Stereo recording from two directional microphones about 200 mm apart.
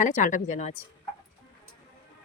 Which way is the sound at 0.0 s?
40° left (ahead or behind).